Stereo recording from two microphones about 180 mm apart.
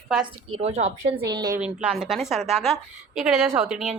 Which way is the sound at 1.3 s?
20° right (ahead or behind).